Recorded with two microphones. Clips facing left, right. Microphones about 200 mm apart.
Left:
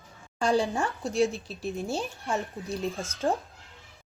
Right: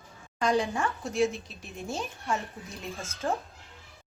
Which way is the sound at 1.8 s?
Centre (ahead or behind).